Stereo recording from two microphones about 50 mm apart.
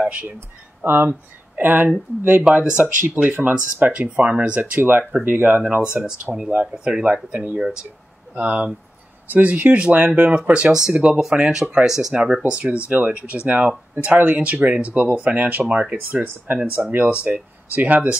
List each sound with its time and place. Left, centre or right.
0.8 s speech: right
5.8 s speech: right
6.3 s speech: centre
6.7 s speech: right
7.5 s speech: centre
8.4 s speech: right
10.7 s speech: centre; by 15.6 s right
15.7 s speech: centre
16.1 s speech: right